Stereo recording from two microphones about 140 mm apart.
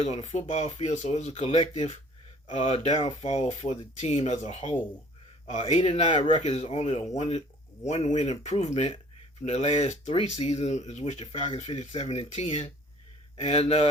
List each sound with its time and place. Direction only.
0.0 s speech: 55° left (ahead or behind)
10.1 s speech: 40° left (ahead or behind); by 12.0 s 55° left (ahead or behind)
12.0 s speech: 40° left (ahead or behind)